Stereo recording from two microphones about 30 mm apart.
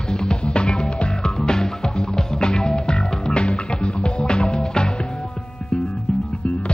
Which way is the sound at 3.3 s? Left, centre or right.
Left.